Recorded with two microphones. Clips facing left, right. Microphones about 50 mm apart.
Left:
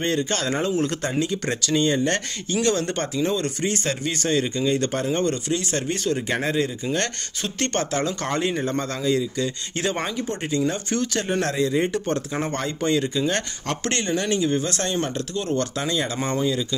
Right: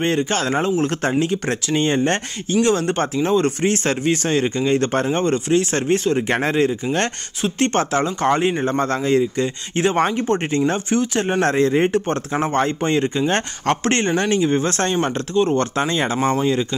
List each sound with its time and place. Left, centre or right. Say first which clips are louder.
0.0 s speech: right 4 dB; right
6.2 s speech: right 5 dB; right
7.4 s speech: right 7 dB; right
10.0 s speech: right 8 dB; right
10.9 s speech: right 5 dB; right
11.4 s speech: right 8 dB; right
16.2 s speech: right 6 dB; right